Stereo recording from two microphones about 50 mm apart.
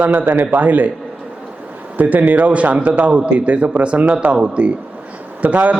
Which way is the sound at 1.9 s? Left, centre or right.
Right.